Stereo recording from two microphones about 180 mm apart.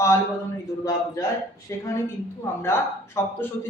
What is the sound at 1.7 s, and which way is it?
Speech, 15° left (ahead or behind).